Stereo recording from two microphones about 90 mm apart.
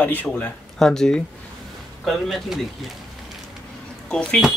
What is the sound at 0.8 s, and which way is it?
Speech, 5° left (ahead or behind).